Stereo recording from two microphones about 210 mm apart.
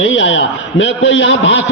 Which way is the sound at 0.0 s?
65° left (ahead or behind).